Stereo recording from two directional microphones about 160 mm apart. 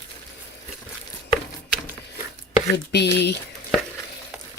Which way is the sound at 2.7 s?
90° left.